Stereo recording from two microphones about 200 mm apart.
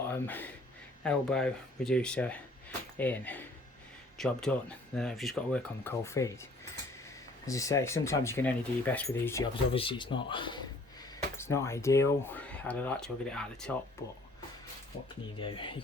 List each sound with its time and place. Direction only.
0.0 s a sound: 10° left (ahead or behind)
1.0 s speech: 5° left (ahead or behind)
9.7 s speech: 25° left (ahead or behind)
11.3 s speech: 15° left (ahead or behind)
15.4 s speech: 25° left (ahead or behind)